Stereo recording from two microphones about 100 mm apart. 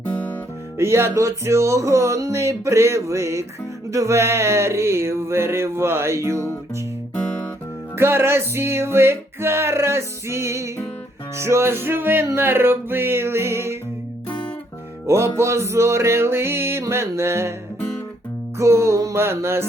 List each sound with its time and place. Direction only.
0.8 s music: 25° right (ahead or behind)
7.9 s music: 25° right (ahead or behind)
15.0 s music: 30° right (ahead or behind)
18.5 s music: 30° right (ahead or behind)